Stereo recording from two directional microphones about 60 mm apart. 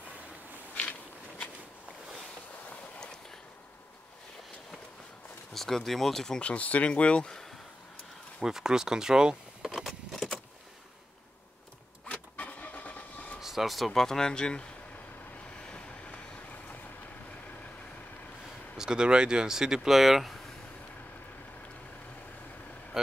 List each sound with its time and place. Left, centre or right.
5.5 s speech: centre
6.5 s speech: left
8.4 s keys jangling: centre
12.1 s vehicle: left
13.4 s speech: centre
15.4 s vehicle: centre
18.8 s speech: centre